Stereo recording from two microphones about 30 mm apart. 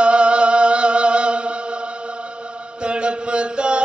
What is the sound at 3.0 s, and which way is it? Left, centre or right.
Chant, right.